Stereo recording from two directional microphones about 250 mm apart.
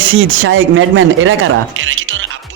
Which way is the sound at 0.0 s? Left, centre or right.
Right.